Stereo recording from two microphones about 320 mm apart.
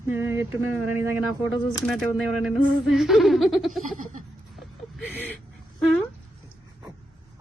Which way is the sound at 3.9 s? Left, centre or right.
Right.